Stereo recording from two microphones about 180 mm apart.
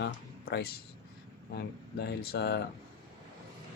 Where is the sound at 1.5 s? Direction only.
65° left (ahead or behind).